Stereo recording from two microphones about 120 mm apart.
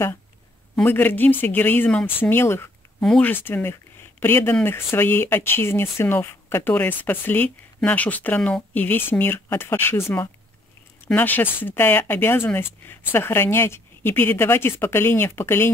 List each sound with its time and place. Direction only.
0.8 s speech: 15° left (ahead or behind)
3.0 s speech: 5° left (ahead or behind)
3.3 s speech: 15° left (ahead or behind)